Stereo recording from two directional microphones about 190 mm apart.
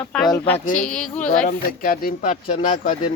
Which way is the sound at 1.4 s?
50° left (ahead or behind).